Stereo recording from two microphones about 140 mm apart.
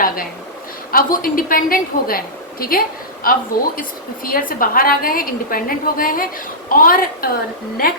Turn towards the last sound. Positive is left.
turn(degrees=90)